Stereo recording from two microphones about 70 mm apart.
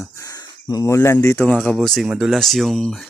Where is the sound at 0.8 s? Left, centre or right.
Left.